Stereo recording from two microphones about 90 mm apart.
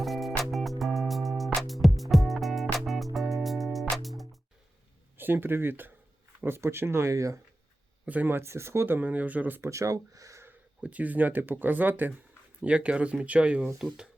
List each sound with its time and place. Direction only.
0.0 s music: centre (ahead or behind)
5.1 s speech: 25° right (ahead or behind)
8.0 s speech: 20° right (ahead or behind)
9.6 s speech: 35° right (ahead or behind)
10.8 s speech: 15° right (ahead or behind)